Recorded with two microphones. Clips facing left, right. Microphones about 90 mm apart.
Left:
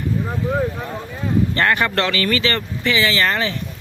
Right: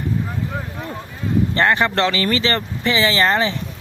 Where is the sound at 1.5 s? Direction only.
20° right (ahead or behind).